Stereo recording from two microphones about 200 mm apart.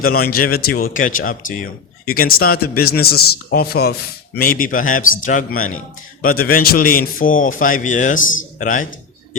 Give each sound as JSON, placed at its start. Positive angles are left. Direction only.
{"t": 0.0, "sound": "a man's voice", "side_deg": 45}